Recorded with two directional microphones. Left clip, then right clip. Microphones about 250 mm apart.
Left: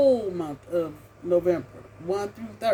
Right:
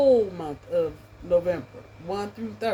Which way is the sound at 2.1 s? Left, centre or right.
Centre.